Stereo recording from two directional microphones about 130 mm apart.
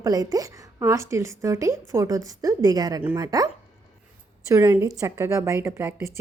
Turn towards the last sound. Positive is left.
turn(degrees=-15)  # may be behind; listen again after turning